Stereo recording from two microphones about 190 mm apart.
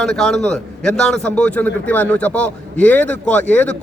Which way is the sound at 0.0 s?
5° left (ahead or behind).